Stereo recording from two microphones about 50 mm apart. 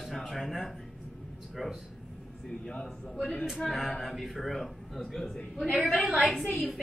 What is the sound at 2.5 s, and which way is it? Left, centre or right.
A woman's voice, centre.